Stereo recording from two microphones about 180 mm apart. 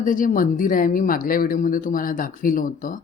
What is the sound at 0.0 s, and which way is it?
A woman's voice, 45° left (ahead or behind).